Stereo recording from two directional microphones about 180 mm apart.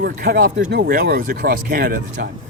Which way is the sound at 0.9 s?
55° right (ahead or behind).